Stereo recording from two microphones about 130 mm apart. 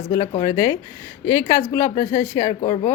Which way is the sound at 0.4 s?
20° left (ahead or behind).